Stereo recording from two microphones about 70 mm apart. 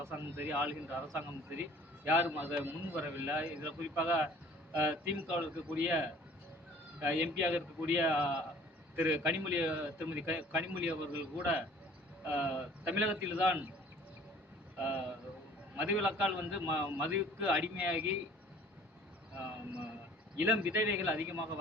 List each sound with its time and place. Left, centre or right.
0.2 s a man's voice: right
14.8 s a man's voice: right
19.4 s a man's voice: right